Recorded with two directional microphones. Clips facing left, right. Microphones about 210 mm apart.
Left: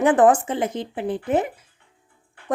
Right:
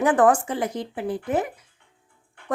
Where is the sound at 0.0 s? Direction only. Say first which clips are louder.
Left 2 dB; 20° left (ahead or behind).